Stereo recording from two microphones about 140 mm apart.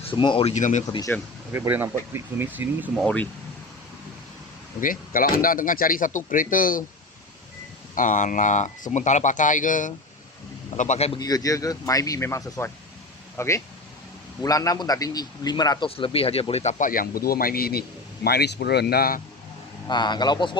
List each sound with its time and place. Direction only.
0.0 s speech: 35° left (ahead or behind)
0.5 s speech: 60° left (ahead or behind)
1.1 s speech: 10° left (ahead or behind)
1.5 s speech: 15° right (ahead or behind)
2.9 s speech: centre (ahead or behind)
4.8 s speech: 85° left
7.9 s speech: 65° left (ahead or behind)
10.8 s a man's voice: 55° left (ahead or behind)
11.2 s speech: 25° left (ahead or behind)
16.0 s speech: 40° left (ahead or behind); by 17.8 s 90° left
18.9 s speech: 90° left
19.9 s a man's voice: 30° left (ahead or behind)